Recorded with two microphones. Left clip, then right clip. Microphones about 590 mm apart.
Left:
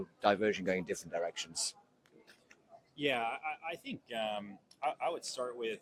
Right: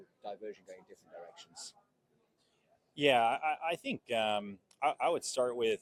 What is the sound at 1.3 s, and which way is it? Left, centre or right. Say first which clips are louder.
Speech: left 11 dB; left.